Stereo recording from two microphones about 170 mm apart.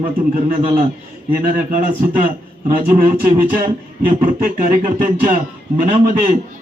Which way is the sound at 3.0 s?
50° right (ahead or behind).